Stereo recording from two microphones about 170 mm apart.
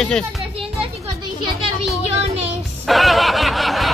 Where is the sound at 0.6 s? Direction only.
30° right (ahead or behind).